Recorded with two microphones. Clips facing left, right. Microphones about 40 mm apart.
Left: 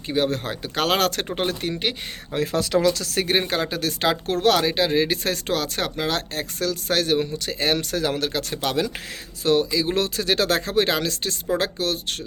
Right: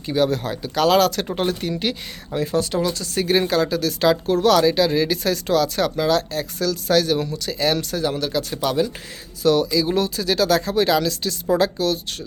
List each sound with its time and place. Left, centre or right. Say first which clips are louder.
0.1 s speech: right 3 dB; left
0.4 s speech: right 4 dB; left
2.3 s speech: right 1 dB; left
2.6 s speech: left 3 dB; left
3.3 s speech: right 6 dB; left
7.9 s speech: right 1 dB; left
9.4 s speech: right 3 dB; left
9.9 s speech: right 1 dB; left